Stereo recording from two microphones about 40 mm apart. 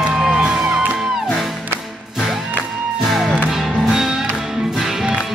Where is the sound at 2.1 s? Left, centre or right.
Centre.